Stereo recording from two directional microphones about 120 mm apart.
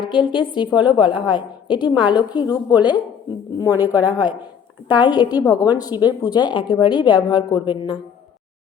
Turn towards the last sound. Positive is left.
turn(degrees=40)  # may be behind; listen again after turning